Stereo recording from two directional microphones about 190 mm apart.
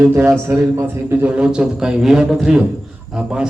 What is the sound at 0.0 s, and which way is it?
A man's voice, 10° right (ahead or behind).